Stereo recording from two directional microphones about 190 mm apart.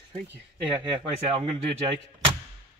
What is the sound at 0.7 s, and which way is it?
Speech, 25° right (ahead or behind).